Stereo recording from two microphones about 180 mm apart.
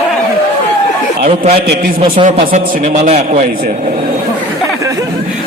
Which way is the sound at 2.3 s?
40° right (ahead or behind).